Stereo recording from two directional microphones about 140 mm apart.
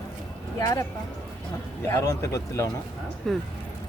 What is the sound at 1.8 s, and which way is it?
Speech, 20° left (ahead or behind).